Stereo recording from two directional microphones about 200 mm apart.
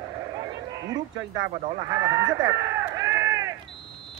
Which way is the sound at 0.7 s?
15° right (ahead or behind).